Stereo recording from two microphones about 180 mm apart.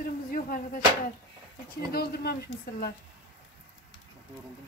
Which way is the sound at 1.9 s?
60° left (ahead or behind).